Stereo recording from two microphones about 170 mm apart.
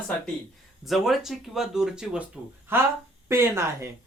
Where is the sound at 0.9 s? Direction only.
Centre (ahead or behind).